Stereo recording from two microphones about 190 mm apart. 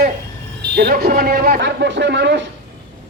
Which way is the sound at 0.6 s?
60° right (ahead or behind).